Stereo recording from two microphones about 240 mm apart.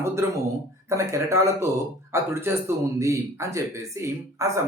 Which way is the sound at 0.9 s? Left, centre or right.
Centre.